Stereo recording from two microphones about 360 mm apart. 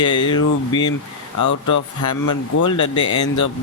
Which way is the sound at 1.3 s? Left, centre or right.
Left.